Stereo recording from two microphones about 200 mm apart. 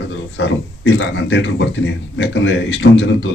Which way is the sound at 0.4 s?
65° left (ahead or behind).